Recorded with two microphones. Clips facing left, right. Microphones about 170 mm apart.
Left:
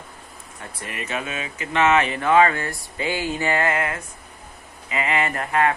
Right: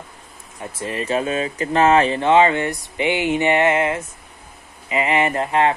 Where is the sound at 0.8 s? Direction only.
30° right (ahead or behind).